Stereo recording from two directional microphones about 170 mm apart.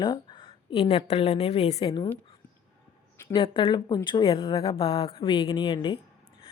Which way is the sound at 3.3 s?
30° left (ahead or behind).